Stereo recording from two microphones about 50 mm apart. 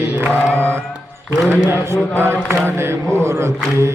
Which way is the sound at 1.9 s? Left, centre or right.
Right.